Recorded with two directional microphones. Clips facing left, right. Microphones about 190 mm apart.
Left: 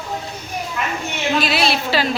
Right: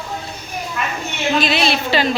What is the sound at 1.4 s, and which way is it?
Speech, 5° left (ahead or behind).